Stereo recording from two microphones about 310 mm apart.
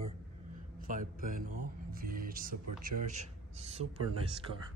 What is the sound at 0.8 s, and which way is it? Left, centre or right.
Speech, right.